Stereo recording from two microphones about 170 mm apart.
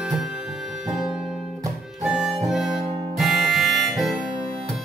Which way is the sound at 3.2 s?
Centre (ahead or behind).